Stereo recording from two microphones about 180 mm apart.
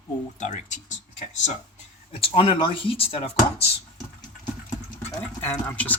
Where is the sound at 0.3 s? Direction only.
40° left (ahead or behind).